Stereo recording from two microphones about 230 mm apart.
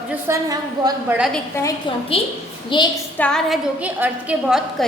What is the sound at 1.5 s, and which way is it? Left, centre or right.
Speech, centre.